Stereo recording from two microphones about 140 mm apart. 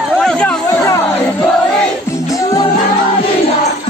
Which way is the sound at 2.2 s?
25° left (ahead or behind).